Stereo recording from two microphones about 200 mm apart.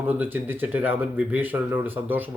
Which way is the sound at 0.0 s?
10° right (ahead or behind).